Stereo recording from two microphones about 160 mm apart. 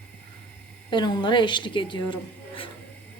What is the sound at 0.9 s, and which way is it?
A woman's voice, 30° left (ahead or behind).